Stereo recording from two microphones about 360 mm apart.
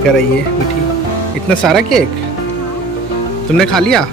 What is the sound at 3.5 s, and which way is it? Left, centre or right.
Speech, centre.